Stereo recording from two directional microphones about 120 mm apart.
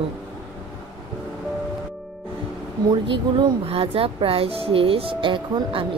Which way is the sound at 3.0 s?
45° right (ahead or behind).